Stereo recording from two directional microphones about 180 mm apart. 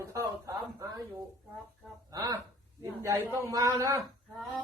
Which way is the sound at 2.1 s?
20° right (ahead or behind).